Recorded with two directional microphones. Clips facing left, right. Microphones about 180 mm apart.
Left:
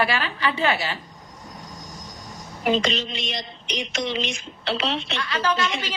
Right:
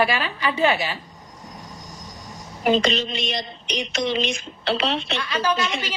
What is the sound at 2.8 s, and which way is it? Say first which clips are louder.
Speech: right 3 dB; 35° right (ahead or behind).